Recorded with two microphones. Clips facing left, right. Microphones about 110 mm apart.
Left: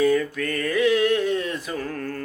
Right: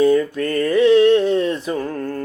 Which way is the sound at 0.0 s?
30° right (ahead or behind).